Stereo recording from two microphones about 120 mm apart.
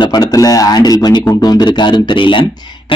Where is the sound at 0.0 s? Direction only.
30° left (ahead or behind).